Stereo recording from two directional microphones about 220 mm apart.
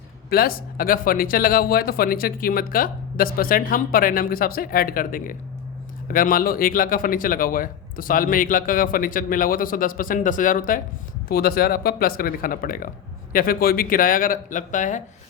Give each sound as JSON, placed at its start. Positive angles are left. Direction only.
{"t": 0.3, "sound": "speech", "side_deg": 40}